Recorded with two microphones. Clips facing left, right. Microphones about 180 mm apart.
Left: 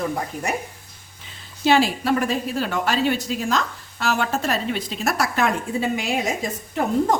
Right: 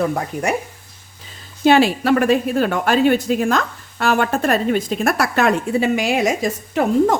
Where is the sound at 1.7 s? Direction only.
65° right (ahead or behind); by 6.8 s 90° right.